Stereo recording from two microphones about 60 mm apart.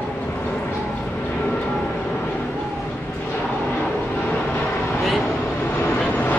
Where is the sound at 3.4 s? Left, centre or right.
Left.